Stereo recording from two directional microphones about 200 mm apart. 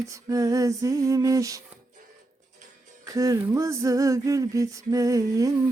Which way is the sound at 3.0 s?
15° right (ahead or behind).